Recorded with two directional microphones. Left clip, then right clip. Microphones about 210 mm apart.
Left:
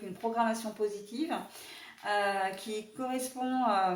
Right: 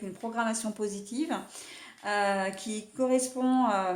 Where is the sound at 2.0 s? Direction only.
40° right (ahead or behind).